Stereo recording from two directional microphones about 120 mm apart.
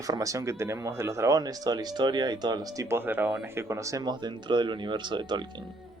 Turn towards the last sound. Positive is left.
turn(degrees=-40)  # may be behind; listen again after turning